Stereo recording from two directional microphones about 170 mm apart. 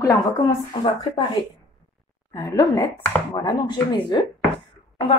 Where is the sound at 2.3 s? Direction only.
20° left (ahead or behind).